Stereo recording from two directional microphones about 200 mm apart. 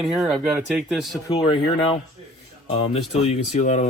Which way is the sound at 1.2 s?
25° left (ahead or behind).